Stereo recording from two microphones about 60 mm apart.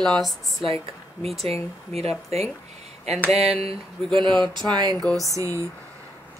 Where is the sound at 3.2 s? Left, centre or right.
Centre.